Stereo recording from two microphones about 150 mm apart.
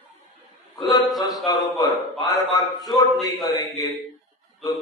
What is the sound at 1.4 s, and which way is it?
Speech, 25° left (ahead or behind).